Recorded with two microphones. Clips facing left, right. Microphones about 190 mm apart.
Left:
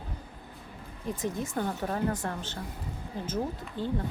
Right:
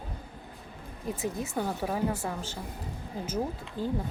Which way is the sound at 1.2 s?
10° right (ahead or behind).